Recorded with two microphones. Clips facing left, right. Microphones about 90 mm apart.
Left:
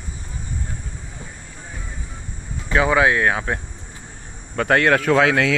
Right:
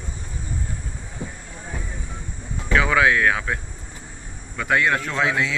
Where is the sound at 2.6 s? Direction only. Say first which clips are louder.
Left 2 dB; 25° left (ahead or behind).